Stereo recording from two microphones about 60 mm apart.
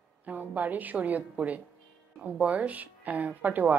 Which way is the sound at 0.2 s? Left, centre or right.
Right.